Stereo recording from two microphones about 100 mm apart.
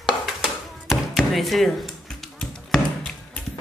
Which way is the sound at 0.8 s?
Centre (ahead or behind).